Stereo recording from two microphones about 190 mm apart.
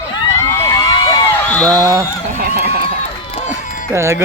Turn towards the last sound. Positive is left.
turn(degrees=-15)  # may be behind; listen again after turning